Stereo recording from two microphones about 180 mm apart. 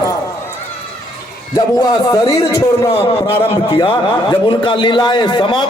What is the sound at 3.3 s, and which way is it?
A man's voice, 30° left (ahead or behind).